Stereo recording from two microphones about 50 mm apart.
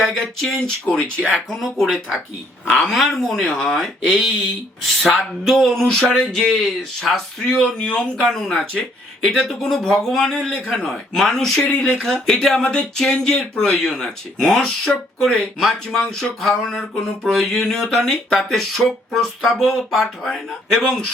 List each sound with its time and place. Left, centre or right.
0.0 s speech: centre
0.9 s speech: centre
1.3 s speech: centre
4.0 s speech: centre
8.3 s speech: centre